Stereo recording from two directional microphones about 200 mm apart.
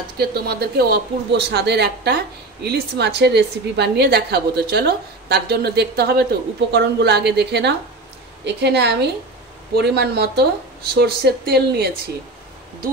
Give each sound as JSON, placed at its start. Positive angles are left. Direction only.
{"t": 0.2, "sound": "speech", "side_deg": -50}